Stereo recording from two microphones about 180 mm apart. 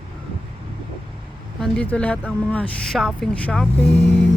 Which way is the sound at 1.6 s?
5° left (ahead or behind).